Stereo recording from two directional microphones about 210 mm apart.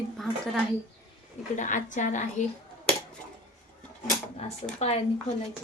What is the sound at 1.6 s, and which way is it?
Speech, 35° left (ahead or behind).